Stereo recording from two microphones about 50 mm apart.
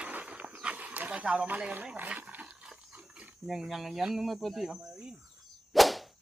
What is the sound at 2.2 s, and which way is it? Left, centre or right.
Dog, right.